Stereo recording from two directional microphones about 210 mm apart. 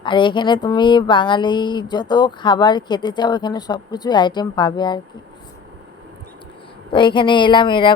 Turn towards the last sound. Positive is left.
turn(degrees=25)  # may be behind; listen again after turning